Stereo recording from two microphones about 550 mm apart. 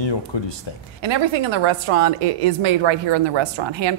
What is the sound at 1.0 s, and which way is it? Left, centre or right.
A woman's voice, right.